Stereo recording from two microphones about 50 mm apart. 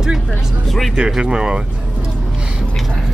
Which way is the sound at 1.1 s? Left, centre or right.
Centre.